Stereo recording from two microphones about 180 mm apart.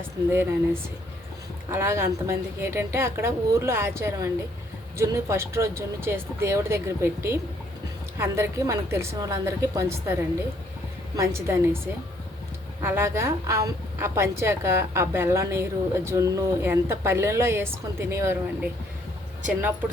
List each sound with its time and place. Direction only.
0.3 s a woman's voice: 15° right (ahead or behind)
12.8 s a woman's voice: 15° right (ahead or behind)